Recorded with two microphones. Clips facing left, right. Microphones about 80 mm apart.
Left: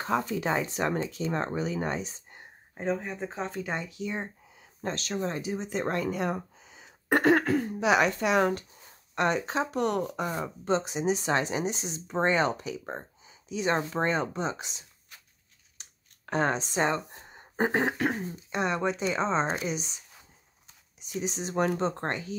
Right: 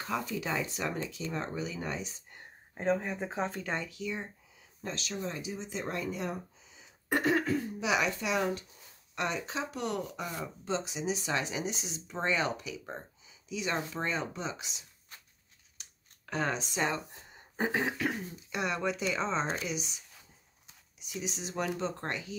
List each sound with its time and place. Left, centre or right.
0.0 s speech: left
2.7 s speech: centre
3.6 s speech: centre
3.9 s speech: left
4.8 s speech: left
21.1 s speech: left